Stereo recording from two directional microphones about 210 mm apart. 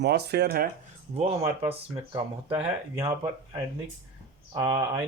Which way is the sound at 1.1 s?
30° right (ahead or behind).